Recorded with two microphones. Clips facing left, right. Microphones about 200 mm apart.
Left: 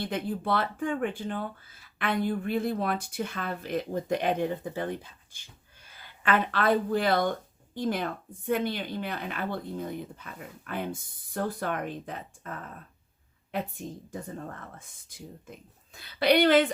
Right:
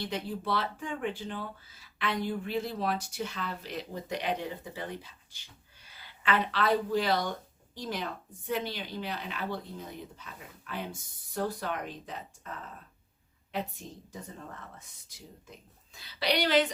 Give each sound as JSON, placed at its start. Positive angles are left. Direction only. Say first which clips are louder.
{"t": 0.0, "sound": "a woman's voice", "louder": "left 4 dB", "side_deg": 55}
{"t": 14.1, "sound": "a woman's voice", "louder": "left 6 dB", "side_deg": 50}